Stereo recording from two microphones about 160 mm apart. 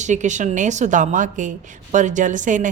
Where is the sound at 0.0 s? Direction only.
50° right (ahead or behind).